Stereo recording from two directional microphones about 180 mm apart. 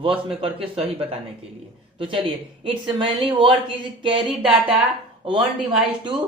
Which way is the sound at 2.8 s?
30° right (ahead or behind).